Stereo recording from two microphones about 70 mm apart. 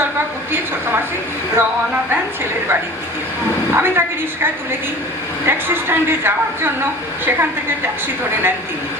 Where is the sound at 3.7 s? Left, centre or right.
Right.